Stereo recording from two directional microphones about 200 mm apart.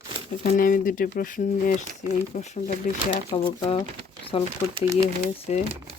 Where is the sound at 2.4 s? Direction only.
35° left (ahead or behind).